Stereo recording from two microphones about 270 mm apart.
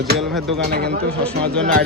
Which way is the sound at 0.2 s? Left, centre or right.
Centre.